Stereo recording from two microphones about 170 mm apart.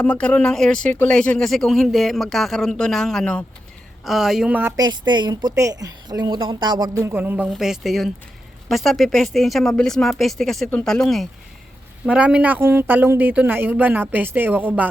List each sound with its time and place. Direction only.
0.0 s speech: 5° left (ahead or behind); by 4.7 s 10° right (ahead or behind)
4.8 s speech: 25° right (ahead or behind)